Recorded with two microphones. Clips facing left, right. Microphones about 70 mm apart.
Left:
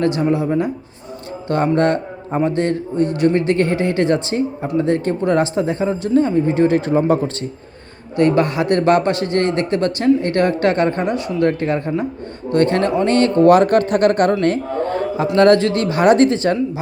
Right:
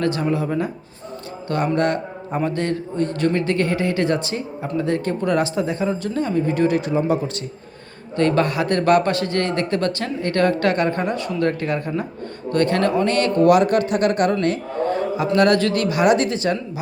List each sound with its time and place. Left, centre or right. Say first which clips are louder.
0.0 s a man's voice: left 4 dB; left
8.1 s a man's voice: left 3 dB; centre; by 16.6 s left